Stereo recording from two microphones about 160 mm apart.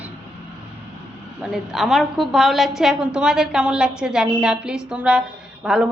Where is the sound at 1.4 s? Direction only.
5° right (ahead or behind).